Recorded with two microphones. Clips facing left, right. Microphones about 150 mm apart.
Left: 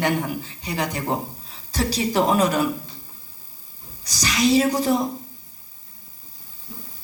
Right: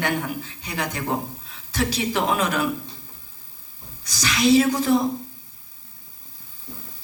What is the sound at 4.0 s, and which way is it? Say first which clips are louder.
Speech: left 1 dB; 40° left (ahead or behind).